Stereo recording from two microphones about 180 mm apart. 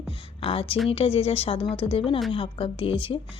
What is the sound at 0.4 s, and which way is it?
A woman's voice, 30° left (ahead or behind).